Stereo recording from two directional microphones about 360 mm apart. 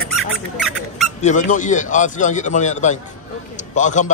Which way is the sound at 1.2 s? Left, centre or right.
Left.